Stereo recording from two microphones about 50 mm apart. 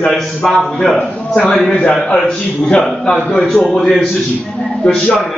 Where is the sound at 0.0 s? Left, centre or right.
Centre.